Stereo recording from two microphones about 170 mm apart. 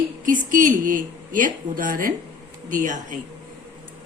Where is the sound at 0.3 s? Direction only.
50° right (ahead or behind).